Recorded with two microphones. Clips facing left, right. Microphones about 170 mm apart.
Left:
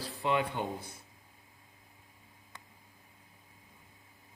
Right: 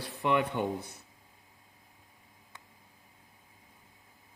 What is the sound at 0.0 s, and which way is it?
Speech, 65° right (ahead or behind).